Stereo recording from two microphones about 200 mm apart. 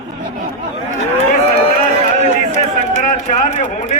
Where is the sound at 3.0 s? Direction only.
40° left (ahead or behind).